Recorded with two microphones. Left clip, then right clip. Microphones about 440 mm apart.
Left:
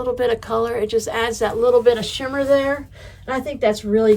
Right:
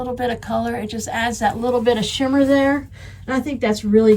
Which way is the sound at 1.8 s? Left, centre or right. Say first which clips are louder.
Left 1 dB; left.